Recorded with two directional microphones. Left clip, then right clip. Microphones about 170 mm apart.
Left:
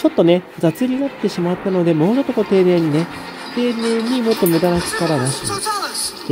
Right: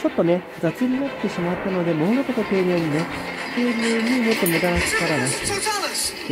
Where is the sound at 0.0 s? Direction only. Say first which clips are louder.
Left 6 dB; 20° left (ahead or behind).